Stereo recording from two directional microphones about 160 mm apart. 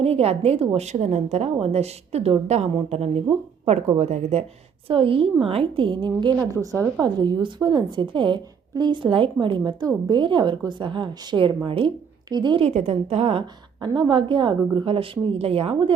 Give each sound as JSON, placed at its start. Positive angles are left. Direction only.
{"t": 0.0, "sound": "a woman's voice", "side_deg": -40}
{"t": 12.6, "sound": "a woman's voice", "side_deg": -40}
{"t": 13.7, "sound": "a woman's voice", "side_deg": -30}